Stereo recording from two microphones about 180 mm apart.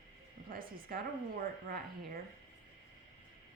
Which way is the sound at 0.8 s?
55° right (ahead or behind).